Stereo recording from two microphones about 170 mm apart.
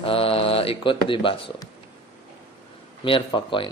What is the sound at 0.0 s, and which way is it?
Speech, 35° left (ahead or behind).